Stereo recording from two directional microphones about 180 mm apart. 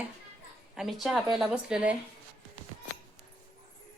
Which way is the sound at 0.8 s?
Centre (ahead or behind).